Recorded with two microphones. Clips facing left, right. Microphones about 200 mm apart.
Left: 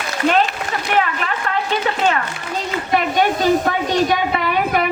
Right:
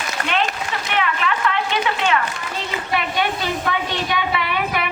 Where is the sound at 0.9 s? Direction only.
40° left (ahead or behind).